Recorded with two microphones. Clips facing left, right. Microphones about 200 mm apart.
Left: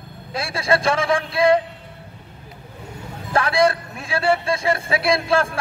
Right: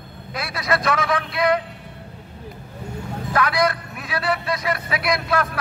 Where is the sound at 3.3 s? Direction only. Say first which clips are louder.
Left 3 dB; 30° left (ahead or behind).